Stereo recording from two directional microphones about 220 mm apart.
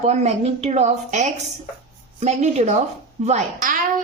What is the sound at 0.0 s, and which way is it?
A woman's voice, 30° right (ahead or behind).